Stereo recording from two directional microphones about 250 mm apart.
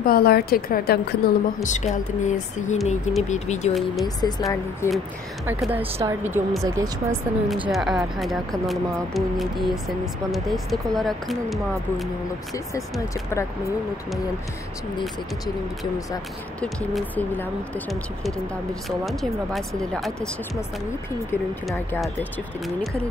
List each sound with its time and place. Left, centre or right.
0.0 s a woman's voice: left
4.0 s speech: centre
5.5 s speech: centre
5.8 s speech: right
6.2 s speech: centre
16.6 s speech: centre
18.9 s speech: centre
21.3 s speech: centre